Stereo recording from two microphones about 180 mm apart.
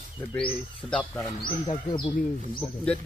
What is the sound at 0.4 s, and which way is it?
Speech, 5° left (ahead or behind).